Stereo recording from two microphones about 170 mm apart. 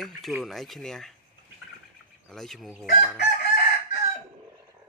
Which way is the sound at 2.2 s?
Centre (ahead or behind).